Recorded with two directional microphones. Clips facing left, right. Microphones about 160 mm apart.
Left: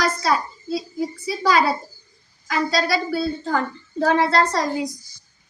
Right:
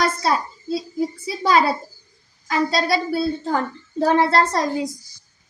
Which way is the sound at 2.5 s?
25° right (ahead or behind).